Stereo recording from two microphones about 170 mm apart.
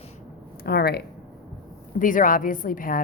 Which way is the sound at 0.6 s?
70° left (ahead or behind).